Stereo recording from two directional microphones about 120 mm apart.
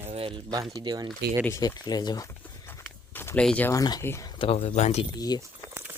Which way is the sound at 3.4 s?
10° left (ahead or behind).